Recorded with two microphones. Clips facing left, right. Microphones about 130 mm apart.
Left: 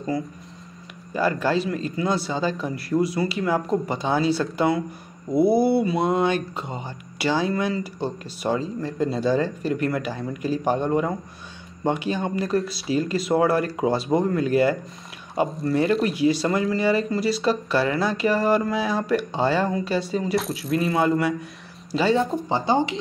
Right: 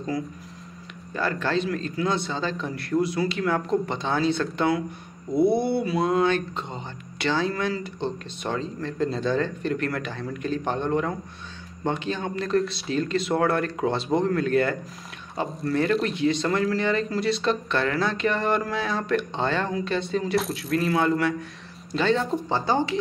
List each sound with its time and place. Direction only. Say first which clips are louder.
1.1 s speech: left 3 dB; 10° left (ahead or behind)